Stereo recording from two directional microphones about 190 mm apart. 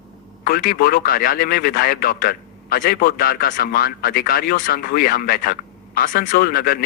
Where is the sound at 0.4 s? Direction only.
50° left (ahead or behind).